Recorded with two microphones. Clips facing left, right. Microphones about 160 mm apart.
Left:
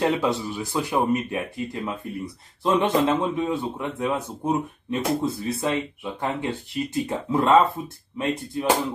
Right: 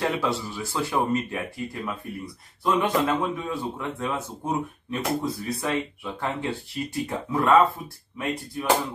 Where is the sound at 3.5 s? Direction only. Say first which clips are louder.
Left 3 dB; 20° left (ahead or behind).